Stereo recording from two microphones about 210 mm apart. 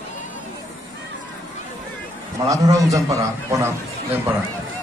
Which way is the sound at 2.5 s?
15° right (ahead or behind).